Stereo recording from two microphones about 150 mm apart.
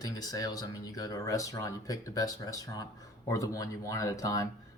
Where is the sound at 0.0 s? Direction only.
25° left (ahead or behind).